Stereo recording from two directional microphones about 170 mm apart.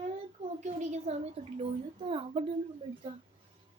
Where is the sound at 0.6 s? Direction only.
45° right (ahead or behind).